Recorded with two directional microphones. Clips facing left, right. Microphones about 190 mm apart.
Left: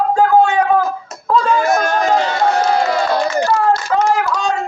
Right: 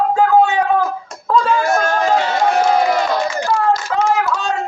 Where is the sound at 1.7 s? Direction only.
15° left (ahead or behind).